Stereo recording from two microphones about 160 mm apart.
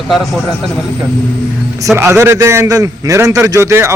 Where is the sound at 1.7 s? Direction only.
15° right (ahead or behind).